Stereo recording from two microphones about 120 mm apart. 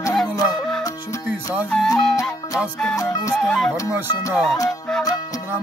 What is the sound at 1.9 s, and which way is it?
Music, 30° left (ahead or behind).